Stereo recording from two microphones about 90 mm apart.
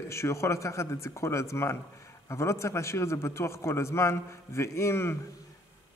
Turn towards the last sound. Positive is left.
turn(degrees=30)  # may be behind; listen again after turning